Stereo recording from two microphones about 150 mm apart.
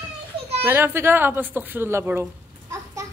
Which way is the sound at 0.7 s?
15° right (ahead or behind).